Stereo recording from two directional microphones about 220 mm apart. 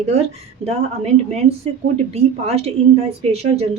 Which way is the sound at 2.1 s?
30° right (ahead or behind).